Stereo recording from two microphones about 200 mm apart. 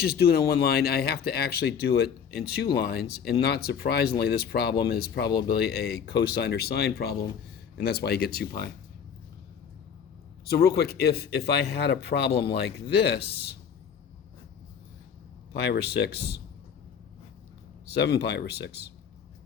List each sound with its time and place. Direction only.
0.0 s speech: 50° left (ahead or behind)
10.5 s speech: 50° left (ahead or behind)
15.5 s speech: 55° left (ahead or behind)
17.9 s speech: 55° left (ahead or behind)